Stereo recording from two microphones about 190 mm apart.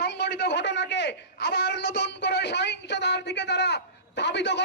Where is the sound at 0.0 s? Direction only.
60° left (ahead or behind).